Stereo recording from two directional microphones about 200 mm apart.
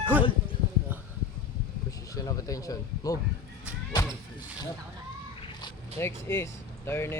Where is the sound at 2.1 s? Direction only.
15° left (ahead or behind).